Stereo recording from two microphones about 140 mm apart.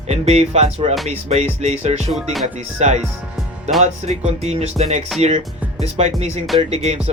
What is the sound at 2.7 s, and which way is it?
Speech, 55° right (ahead or behind).